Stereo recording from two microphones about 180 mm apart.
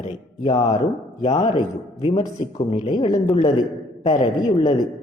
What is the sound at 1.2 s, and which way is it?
A man's voice, 40° left (ahead or behind).